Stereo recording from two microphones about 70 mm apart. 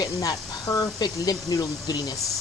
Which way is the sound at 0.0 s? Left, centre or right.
Left.